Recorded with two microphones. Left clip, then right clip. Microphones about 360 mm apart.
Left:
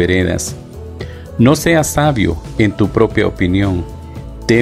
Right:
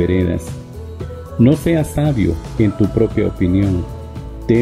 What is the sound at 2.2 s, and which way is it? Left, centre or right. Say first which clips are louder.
Speech: left 2 dB; centre.